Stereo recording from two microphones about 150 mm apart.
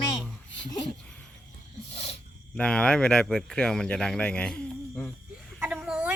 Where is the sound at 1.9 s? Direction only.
45° left (ahead or behind).